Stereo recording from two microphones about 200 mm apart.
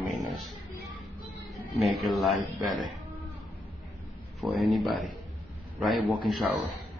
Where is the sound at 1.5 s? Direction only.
Centre (ahead or behind).